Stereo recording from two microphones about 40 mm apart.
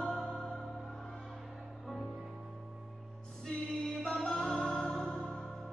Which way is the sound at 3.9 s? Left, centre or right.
Centre.